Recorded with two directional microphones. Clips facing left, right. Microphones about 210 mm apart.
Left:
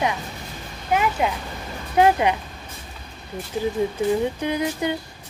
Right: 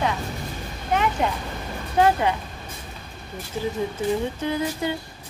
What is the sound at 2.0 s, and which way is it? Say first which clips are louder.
Female singing: left 2 dB; 15° left (ahead or behind).